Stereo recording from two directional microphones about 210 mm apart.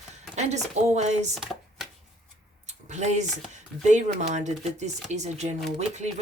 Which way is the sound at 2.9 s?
35° right (ahead or behind).